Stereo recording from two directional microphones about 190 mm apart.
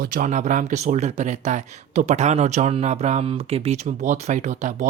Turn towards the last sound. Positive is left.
turn(degrees=-40)  # may be behind; listen again after turning